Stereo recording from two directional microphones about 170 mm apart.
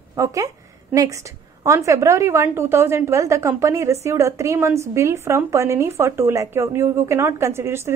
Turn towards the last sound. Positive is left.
turn(degrees=-15)  # may be behind; listen again after turning